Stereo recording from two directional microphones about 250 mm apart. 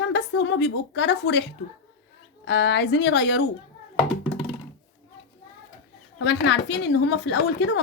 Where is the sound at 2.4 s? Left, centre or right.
Left.